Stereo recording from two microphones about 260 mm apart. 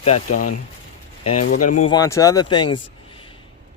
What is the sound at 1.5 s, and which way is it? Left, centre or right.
Speech, left.